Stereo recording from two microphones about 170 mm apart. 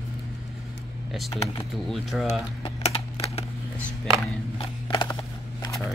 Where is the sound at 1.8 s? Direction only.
Centre (ahead or behind).